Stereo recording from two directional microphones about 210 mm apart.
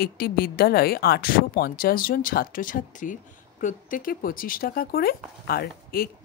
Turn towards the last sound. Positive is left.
turn(degrees=45)  # may be behind; listen again after turning